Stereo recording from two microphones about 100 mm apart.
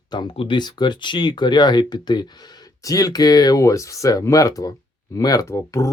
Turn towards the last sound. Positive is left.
turn(degrees=35)  # may be behind; listen again after turning